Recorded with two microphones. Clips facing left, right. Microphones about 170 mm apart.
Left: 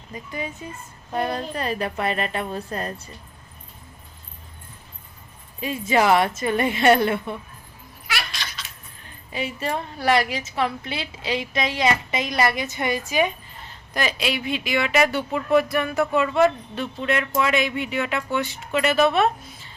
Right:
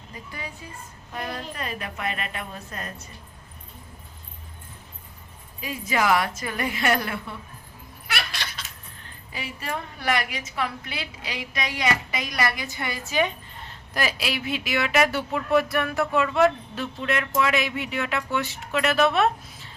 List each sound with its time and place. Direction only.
0.3 s a woman's voice: 20° left (ahead or behind)
1.1 s a woman's voice: 35° left (ahead or behind)
5.5 s a woman's voice: 25° left (ahead or behind)
8.0 s cat: 60° right (ahead or behind)
9.3 s a woman's voice: 25° left (ahead or behind)
13.7 s speech: 5° right (ahead or behind)